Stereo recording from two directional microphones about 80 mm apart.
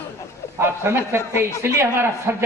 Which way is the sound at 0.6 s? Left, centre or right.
Right.